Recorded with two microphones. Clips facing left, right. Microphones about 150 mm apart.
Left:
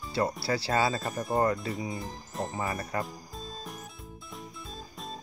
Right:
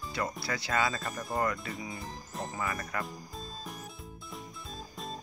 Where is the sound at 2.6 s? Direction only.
30° left (ahead or behind).